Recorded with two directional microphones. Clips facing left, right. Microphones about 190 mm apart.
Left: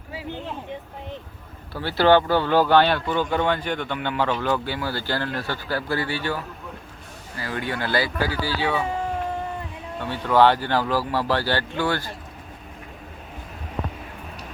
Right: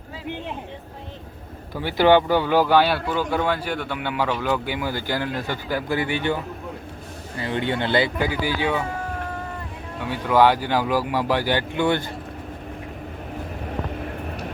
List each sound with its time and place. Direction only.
1.7 s speech: 15° right (ahead or behind)
10.0 s speech: 10° right (ahead or behind)